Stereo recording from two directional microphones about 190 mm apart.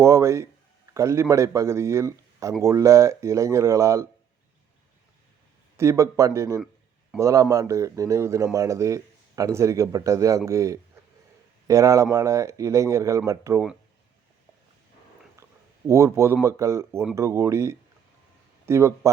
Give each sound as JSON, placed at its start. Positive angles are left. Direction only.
{"t": 0.0, "sound": "speech", "side_deg": -15}
{"t": 5.7, "sound": "speech", "side_deg": -15}
{"t": 15.9, "sound": "speech", "side_deg": -15}